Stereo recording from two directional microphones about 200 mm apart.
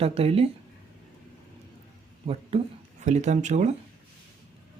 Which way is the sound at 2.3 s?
35° right (ahead or behind).